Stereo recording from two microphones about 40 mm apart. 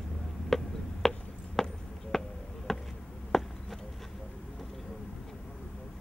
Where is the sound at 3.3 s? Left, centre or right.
Centre.